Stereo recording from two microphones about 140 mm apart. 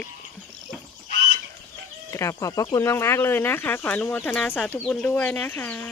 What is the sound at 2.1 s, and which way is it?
Speech, 20° left (ahead or behind).